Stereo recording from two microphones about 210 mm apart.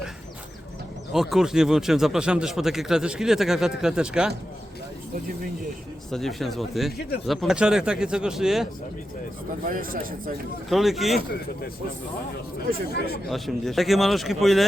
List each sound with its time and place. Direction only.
1.1 s speech: centre (ahead or behind)
6.1 s speech: centre (ahead or behind)
9.6 s speech: 40° right (ahead or behind)
10.7 s speech: centre (ahead or behind)
12.9 s speech: 50° left (ahead or behind)
13.3 s speech: centre (ahead or behind)